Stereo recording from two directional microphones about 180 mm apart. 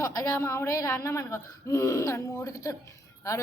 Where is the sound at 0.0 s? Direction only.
20° left (ahead or behind).